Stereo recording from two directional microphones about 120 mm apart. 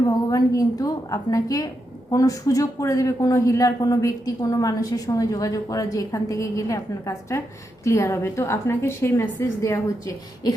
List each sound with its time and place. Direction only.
0.0 s a woman's voice: 30° left (ahead or behind)